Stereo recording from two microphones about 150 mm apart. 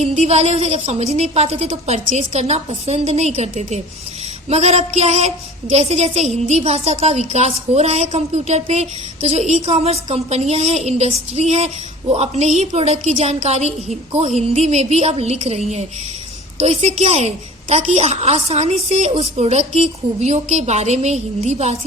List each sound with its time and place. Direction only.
0.0 s a woman's voice: 45° right (ahead or behind)